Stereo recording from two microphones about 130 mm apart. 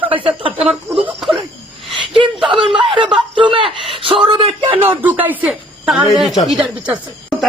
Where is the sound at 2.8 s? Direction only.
40° right (ahead or behind).